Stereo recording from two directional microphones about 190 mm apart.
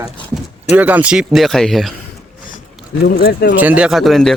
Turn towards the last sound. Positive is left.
turn(degrees=0)  # may be behind; listen again after turning